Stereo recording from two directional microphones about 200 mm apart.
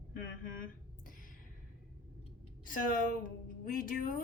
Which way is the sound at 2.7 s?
40° left (ahead or behind).